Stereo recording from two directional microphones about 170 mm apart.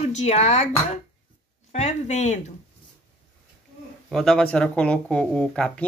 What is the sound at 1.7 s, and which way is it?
Speech, 40° left (ahead or behind).